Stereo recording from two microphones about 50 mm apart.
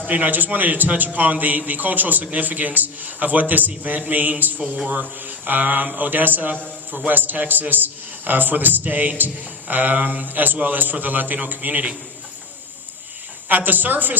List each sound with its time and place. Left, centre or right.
0.0 s a man's voice: right
13.5 s a man's voice: right